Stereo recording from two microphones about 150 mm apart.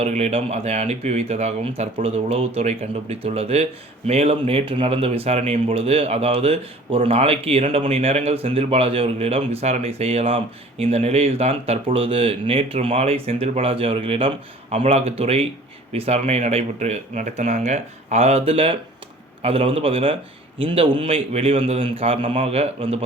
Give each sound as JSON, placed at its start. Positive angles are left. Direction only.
{"t": 0.0, "sound": "speech", "side_deg": -45}